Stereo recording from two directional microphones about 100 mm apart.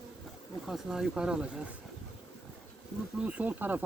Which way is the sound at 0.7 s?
5° right (ahead or behind).